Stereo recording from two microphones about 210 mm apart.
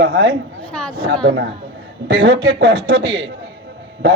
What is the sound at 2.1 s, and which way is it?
A man's voice, 50° right (ahead or behind).